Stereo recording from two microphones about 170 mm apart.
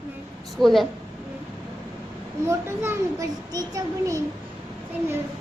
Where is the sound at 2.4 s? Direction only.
15° right (ahead or behind).